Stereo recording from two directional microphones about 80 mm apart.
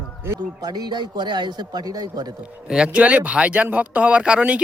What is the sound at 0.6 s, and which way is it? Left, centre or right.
A man's voice, right.